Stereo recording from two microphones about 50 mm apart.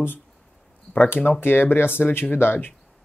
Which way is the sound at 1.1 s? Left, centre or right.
Left.